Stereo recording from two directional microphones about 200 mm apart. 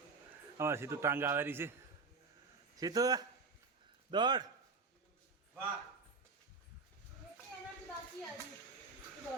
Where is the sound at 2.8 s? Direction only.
20° right (ahead or behind).